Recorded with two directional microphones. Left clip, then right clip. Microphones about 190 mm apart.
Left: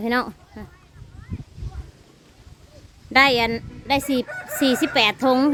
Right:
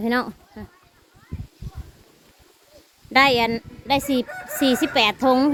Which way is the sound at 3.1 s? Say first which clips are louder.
Even; centre (ahead or behind).